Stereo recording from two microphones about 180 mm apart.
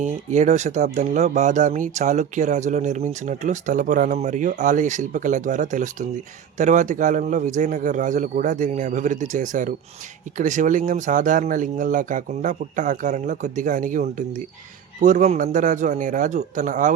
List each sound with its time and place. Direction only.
0.0 s speech: 40° right (ahead or behind)